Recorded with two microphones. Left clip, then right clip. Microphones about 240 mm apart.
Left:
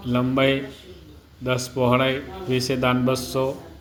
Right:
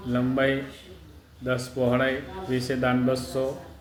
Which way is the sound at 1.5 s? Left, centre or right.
Left.